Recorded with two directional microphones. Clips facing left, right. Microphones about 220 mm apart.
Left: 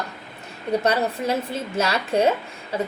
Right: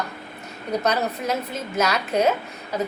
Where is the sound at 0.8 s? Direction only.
30° left (ahead or behind).